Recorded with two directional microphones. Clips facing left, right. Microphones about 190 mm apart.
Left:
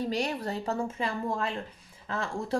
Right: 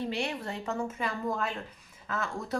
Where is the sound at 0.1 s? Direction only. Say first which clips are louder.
Left 3 dB; 40° left (ahead or behind).